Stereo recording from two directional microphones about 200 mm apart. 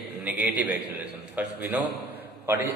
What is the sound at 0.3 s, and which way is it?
A man's voice, 5° right (ahead or behind).